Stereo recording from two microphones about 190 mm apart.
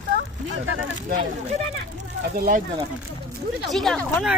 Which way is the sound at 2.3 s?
45° right (ahead or behind).